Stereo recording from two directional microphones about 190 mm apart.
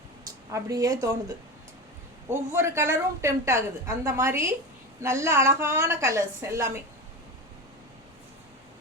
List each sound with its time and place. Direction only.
0.5 s a woman's voice: 20° right (ahead or behind)
2.3 s a woman's voice: 15° right (ahead or behind)